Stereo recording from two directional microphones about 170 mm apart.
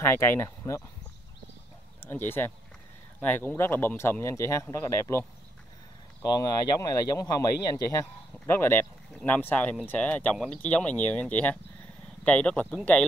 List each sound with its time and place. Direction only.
0.0 s speech: 15° left (ahead or behind)
2.0 s speech: 10° left (ahead or behind)
6.3 s speech: 20° left (ahead or behind); by 13.0 s 5° left (ahead or behind)